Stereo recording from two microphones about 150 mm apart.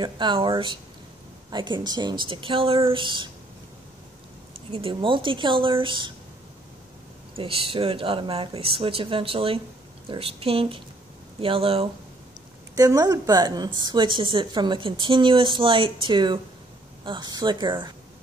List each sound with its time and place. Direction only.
0.0 s a woman's voice: 30° right (ahead or behind)
4.6 s a woman's voice: 35° right (ahead or behind)
7.3 s a woman's voice: 40° right (ahead or behind)
12.7 s a woman's voice: 25° right (ahead or behind)